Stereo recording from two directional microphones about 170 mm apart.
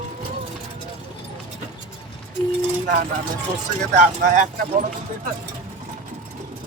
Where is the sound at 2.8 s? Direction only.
50° right (ahead or behind).